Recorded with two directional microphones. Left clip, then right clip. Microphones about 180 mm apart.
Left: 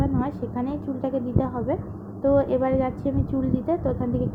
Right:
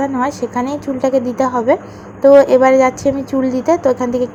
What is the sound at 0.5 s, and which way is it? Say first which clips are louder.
A woman's voice: right 10 dB; 25° right (ahead or behind).